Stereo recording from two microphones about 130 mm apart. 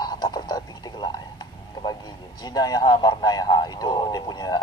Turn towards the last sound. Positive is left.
turn(degrees=35)  # may be behind; listen again after turning